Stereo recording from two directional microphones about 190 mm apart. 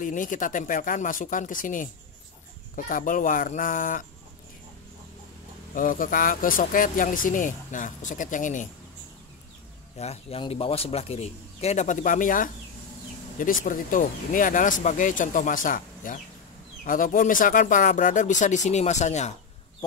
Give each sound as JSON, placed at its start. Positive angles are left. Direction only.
{"t": 0.0, "sound": "speech", "side_deg": 45}
{"t": 5.8, "sound": "speech", "side_deg": 45}
{"t": 9.9, "sound": "speech", "side_deg": 30}